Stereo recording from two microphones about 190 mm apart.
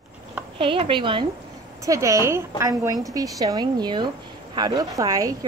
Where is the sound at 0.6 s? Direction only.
30° right (ahead or behind).